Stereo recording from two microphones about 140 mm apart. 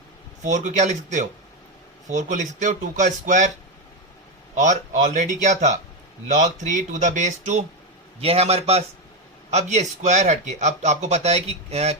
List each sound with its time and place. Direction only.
0.4 s speech: 60° right (ahead or behind)
4.5 s speech: 60° right (ahead or behind)
8.2 s a man's voice: 45° right (ahead or behind)